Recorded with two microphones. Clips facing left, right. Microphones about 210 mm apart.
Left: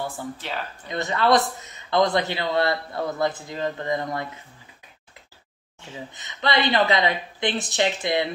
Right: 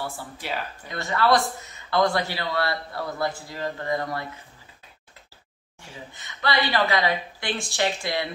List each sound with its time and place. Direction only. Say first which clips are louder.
0.4 s speech: right 4 dB; 10° right (ahead or behind)
0.8 s a man's voice: left 1 dB; 20° left (ahead or behind)
6.1 s a man's voice: left 2 dB; 20° left (ahead or behind)